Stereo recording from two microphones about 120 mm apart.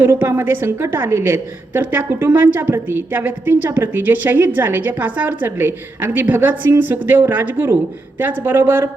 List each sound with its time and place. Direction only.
0.0 s a woman's voice: 15° right (ahead or behind)